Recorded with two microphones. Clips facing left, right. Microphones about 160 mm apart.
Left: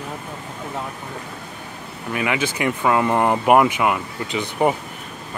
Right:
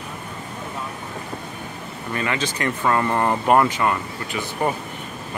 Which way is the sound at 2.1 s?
10° left (ahead or behind).